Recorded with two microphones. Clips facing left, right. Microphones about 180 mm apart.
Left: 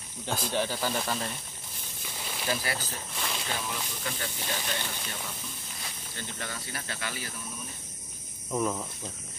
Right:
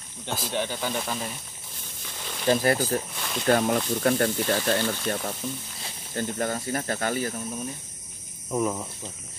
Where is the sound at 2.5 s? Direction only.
50° right (ahead or behind).